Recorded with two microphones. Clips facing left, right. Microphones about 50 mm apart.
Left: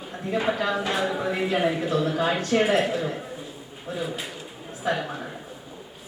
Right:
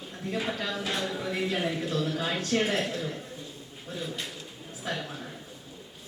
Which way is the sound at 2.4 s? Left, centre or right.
Centre.